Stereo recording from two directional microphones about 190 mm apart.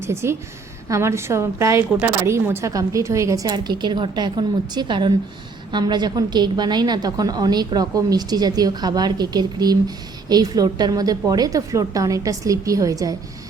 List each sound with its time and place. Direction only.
0.0 s a woman's voice: 15° right (ahead or behind)